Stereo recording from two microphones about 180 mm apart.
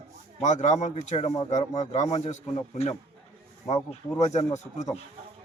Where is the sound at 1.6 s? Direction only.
20° left (ahead or behind).